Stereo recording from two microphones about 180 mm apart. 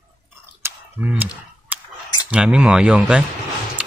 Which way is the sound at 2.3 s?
5° right (ahead or behind).